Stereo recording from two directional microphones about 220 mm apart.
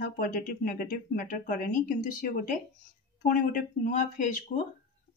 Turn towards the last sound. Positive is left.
turn(degrees=35)  # may be behind; listen again after turning